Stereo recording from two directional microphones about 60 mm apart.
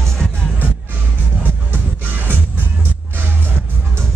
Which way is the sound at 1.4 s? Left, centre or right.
Right.